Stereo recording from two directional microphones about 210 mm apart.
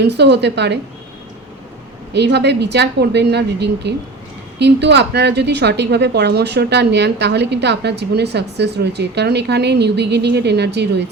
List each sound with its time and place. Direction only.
0.0 s a woman's voice: 55° right (ahead or behind)
2.1 s a woman's voice: 55° right (ahead or behind)